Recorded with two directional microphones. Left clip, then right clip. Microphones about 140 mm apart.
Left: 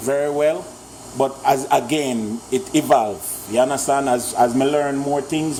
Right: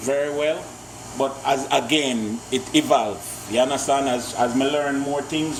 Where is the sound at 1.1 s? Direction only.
50° left (ahead or behind).